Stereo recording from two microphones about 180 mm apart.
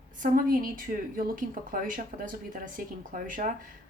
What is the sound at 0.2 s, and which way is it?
A woman's voice, 50° right (ahead or behind).